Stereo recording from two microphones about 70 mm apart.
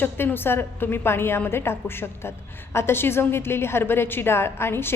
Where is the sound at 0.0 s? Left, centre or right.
Left.